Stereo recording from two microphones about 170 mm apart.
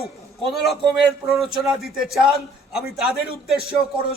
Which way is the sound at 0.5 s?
Centre (ahead or behind).